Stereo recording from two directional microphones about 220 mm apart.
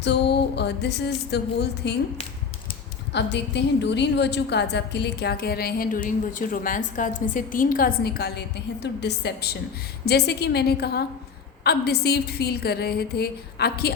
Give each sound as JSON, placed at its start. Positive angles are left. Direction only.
{"t": 0.0, "sound": "a woman's voice", "side_deg": 50}
{"t": 3.1, "sound": "a woman's voice", "side_deg": 50}